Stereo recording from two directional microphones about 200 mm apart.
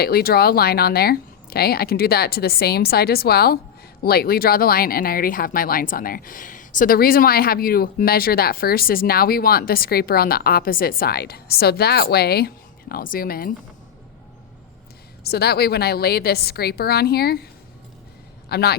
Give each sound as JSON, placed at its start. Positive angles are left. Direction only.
{"t": 0.0, "sound": "speech", "side_deg": 50}
{"t": 15.2, "sound": "a man's voice", "side_deg": 50}